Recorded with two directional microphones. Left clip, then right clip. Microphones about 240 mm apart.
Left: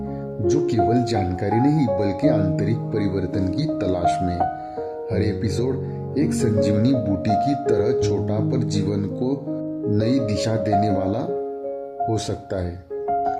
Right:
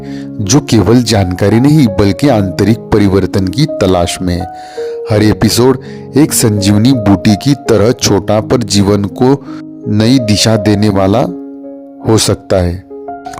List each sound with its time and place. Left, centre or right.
0.4 s speech: right